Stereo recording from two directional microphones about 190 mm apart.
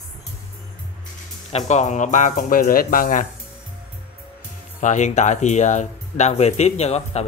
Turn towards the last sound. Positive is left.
turn(degrees=35)  # may be behind; listen again after turning